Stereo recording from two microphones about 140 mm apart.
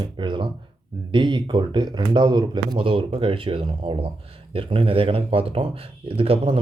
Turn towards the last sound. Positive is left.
turn(degrees=-40)  # may be behind; listen again after turning